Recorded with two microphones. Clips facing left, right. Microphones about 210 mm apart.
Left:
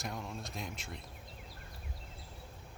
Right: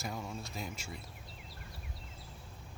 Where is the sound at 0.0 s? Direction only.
Centre (ahead or behind).